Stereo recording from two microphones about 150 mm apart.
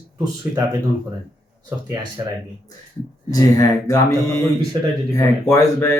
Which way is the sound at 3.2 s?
20° left (ahead or behind).